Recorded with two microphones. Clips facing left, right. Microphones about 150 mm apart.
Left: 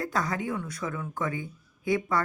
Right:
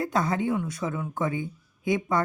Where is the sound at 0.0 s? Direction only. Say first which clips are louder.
Right 4 dB; 20° right (ahead or behind).